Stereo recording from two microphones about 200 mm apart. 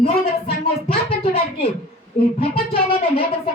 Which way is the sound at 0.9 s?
30° left (ahead or behind).